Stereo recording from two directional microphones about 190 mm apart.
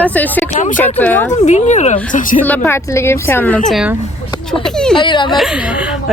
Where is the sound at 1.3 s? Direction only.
40° left (ahead or behind).